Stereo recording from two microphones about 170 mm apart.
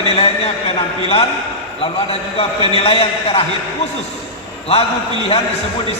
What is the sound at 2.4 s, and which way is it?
A man's voice, 35° left (ahead or behind).